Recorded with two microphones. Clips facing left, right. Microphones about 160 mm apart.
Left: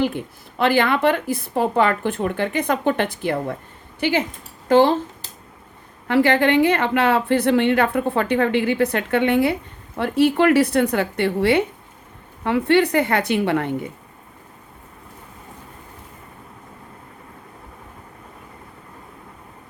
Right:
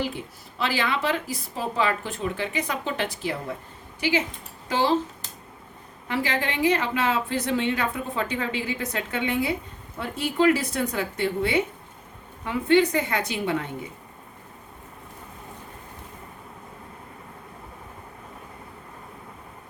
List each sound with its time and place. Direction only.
0.6 s a woman's voice: 55° left (ahead or behind)
4.7 s speech: 55° left (ahead or behind)
6.1 s a woman's voice: 65° left (ahead or behind)